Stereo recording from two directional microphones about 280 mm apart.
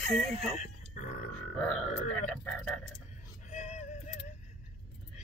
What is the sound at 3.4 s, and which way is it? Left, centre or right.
Music, left.